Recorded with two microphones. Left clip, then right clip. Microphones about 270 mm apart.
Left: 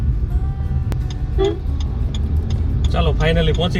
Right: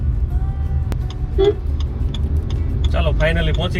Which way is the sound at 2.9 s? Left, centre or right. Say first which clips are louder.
Even; centre.